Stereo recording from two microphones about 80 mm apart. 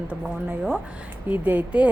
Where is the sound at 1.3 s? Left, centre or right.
Right.